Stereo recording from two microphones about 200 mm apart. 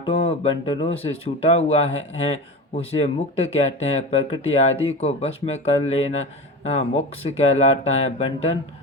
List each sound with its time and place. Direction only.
0.0 s speech: 30° left (ahead or behind)